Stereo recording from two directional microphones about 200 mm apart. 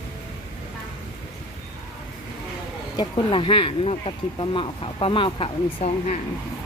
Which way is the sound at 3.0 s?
25° left (ahead or behind).